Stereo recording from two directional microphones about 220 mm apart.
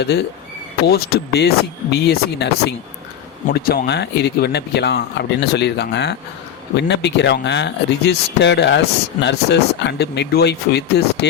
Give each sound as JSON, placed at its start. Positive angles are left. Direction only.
{"t": 0.0, "sound": "speech", "side_deg": 50}